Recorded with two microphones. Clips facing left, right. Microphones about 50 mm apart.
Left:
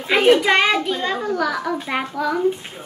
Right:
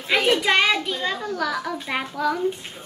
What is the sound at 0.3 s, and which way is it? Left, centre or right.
A child's voice, centre.